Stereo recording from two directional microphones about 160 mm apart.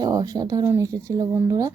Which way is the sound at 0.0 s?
25° right (ahead or behind).